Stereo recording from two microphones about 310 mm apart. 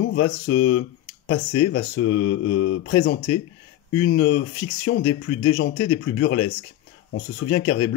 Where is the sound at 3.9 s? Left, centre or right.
Centre.